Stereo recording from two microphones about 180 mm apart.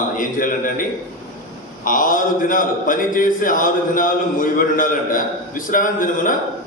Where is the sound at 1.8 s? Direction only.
50° left (ahead or behind).